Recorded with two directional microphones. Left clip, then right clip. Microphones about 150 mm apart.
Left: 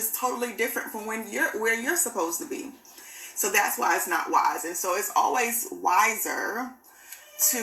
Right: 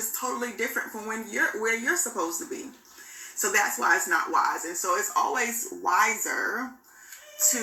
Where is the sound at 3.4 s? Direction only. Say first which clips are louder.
Even; 15° left (ahead or behind).